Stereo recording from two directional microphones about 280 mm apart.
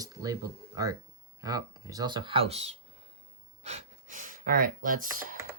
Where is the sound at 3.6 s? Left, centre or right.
Right.